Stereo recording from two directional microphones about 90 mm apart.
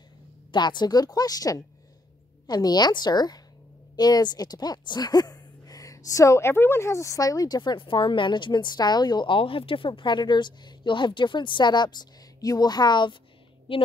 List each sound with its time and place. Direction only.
0.5 s speech: 55° left (ahead or behind)
13.7 s a woman's voice: 90° left